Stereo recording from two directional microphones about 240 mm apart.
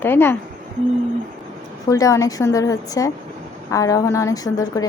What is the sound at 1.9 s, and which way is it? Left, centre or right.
A woman's voice, centre.